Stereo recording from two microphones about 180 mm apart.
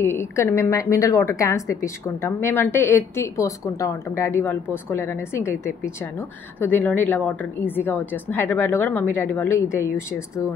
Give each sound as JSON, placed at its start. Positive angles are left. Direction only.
{"t": 0.0, "sound": "a woman's voice", "side_deg": 15}
{"t": 6.6, "sound": "a woman's voice", "side_deg": 10}